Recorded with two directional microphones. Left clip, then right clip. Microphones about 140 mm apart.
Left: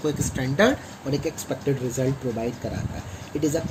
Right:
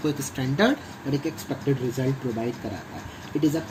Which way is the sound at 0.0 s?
75° left (ahead or behind).